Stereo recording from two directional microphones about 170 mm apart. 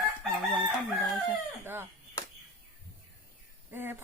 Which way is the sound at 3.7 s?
15° right (ahead or behind).